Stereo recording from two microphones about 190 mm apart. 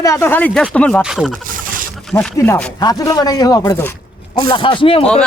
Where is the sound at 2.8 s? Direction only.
20° left (ahead or behind).